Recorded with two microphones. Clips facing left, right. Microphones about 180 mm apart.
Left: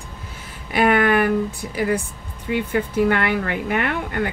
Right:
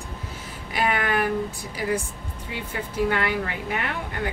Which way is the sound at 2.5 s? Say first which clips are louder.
Left 11 dB; 60° left (ahead or behind).